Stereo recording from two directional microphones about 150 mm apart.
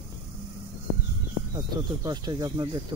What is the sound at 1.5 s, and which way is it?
Speech, 25° right (ahead or behind).